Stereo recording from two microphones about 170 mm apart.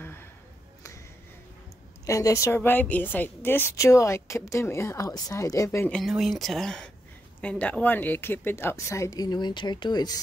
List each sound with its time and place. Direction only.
0.0 s a sound: 15° left (ahead or behind)
2.0 s a woman's voice: 20° left (ahead or behind)
5.9 s a woman's voice: centre (ahead or behind); by 10.2 s 25° left (ahead or behind)